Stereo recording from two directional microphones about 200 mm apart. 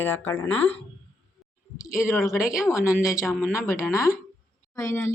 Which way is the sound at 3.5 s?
15° left (ahead or behind).